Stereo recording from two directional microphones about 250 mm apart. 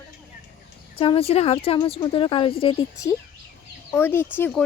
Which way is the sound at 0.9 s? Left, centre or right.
Left.